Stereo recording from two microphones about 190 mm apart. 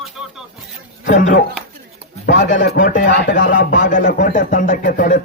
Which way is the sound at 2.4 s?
40° left (ahead or behind).